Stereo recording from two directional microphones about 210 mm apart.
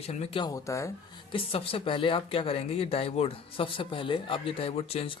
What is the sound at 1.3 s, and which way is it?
Speech, 25° left (ahead or behind).